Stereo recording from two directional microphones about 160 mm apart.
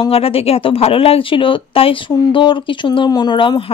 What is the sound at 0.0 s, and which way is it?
Speech, 35° left (ahead or behind).